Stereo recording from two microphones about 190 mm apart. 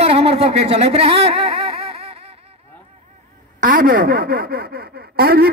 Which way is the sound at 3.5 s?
45° right (ahead or behind).